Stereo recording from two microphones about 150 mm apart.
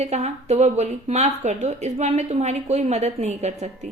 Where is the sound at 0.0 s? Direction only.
45° right (ahead or behind).